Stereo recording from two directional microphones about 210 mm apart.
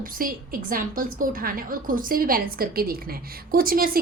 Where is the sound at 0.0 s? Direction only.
40° right (ahead or behind).